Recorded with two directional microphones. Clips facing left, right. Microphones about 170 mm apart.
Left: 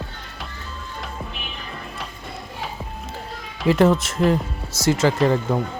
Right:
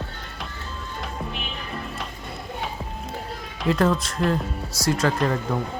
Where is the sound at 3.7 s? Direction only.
25° left (ahead or behind).